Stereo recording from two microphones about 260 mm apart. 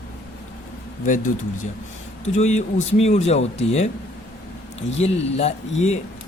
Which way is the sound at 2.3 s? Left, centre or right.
Left.